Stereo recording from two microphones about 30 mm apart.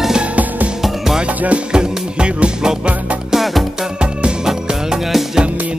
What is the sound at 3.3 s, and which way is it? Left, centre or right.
Music, centre.